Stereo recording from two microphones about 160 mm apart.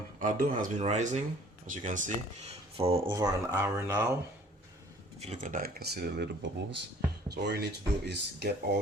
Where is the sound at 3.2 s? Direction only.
20° right (ahead or behind).